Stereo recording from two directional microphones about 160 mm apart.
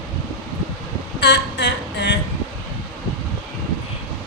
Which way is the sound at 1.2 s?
90° left.